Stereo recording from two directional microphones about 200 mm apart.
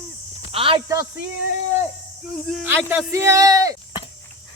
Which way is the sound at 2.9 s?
15° right (ahead or behind).